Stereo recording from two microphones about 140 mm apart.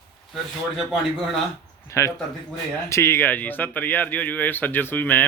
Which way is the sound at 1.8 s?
20° left (ahead or behind).